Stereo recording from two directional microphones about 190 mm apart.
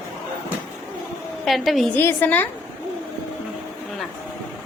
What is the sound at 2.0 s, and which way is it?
Speech, 10° left (ahead or behind).